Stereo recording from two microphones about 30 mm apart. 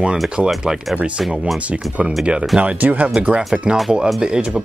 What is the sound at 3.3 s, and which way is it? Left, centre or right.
Speech, right.